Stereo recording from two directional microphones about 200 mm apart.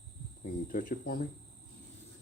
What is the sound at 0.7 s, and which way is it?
Speech, 45° left (ahead or behind).